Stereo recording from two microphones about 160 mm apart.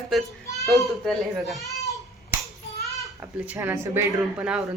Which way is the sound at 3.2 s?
10° right (ahead or behind).